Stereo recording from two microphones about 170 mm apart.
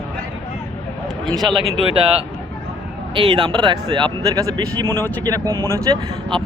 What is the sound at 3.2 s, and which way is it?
Speech, 25° right (ahead or behind).